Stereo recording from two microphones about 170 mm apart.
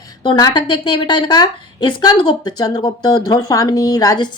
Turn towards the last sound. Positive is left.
turn(degrees=20)  # may be behind; listen again after turning